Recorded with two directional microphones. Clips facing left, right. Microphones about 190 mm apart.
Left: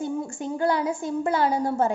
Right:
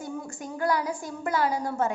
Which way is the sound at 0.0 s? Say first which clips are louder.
Left 7 dB; 25° left (ahead or behind).